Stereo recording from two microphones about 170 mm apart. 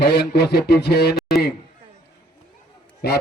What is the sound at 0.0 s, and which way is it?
Speech, 75° left (ahead or behind).